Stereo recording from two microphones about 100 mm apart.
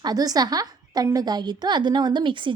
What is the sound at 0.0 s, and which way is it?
A woman's voice, 40° right (ahead or behind).